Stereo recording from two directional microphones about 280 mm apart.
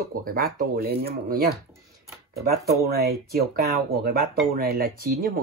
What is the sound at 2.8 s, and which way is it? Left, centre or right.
Speech, right.